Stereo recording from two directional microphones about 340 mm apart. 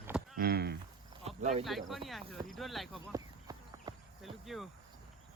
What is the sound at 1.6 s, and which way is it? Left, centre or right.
Speech, centre.